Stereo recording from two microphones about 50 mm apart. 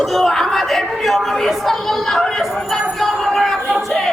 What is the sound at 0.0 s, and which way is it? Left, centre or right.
Speech, centre.